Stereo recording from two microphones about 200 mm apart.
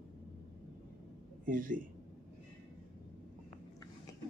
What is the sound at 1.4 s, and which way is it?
Speech, 40° right (ahead or behind).